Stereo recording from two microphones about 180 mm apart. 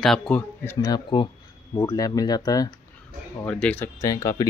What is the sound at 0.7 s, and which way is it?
Speech, 20° left (ahead or behind).